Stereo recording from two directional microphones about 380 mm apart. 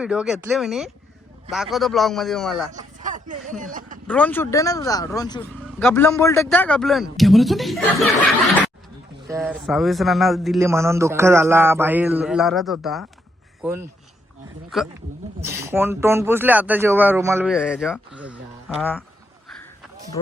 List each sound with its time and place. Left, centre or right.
0.0 s a man's voice: centre
3.0 s chatter: centre
3.6 s speech: right
4.0 s a man's voice: centre